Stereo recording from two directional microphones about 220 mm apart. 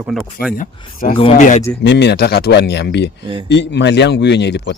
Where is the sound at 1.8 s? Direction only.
50° left (ahead or behind).